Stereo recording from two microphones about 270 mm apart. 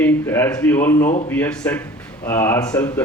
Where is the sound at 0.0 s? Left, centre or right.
Centre.